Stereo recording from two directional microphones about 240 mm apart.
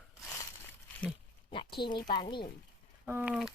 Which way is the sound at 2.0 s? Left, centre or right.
Centre.